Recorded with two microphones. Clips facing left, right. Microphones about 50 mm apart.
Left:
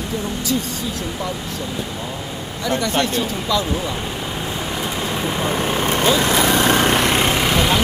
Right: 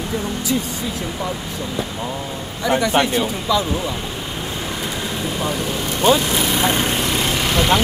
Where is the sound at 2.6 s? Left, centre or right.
Centre.